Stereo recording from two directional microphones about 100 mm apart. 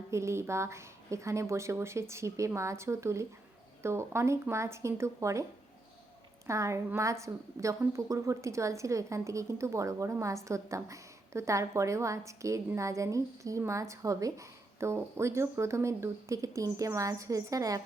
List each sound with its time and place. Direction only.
0.1 s speech: 30° right (ahead or behind)
6.5 s a woman's voice: 30° right (ahead or behind)